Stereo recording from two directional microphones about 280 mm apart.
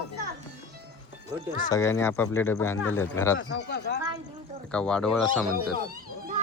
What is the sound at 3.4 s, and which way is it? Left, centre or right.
Cough, left.